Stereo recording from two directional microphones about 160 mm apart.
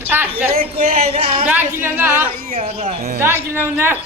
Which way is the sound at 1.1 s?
35° right (ahead or behind).